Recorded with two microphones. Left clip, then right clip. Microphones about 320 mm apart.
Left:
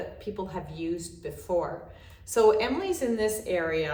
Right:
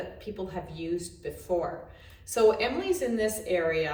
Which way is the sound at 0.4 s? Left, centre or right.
Centre.